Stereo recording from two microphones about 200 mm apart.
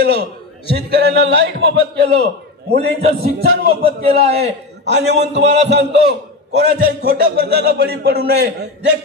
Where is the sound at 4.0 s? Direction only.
30° right (ahead or behind).